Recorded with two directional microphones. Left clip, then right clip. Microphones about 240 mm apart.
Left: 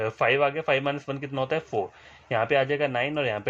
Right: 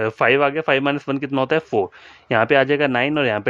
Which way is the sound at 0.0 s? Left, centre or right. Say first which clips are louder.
Right 6 dB; right.